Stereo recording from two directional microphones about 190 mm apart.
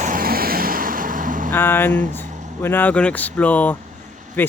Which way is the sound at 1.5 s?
10° left (ahead or behind).